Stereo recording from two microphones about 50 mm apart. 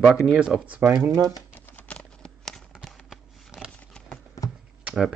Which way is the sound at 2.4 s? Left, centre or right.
Centre.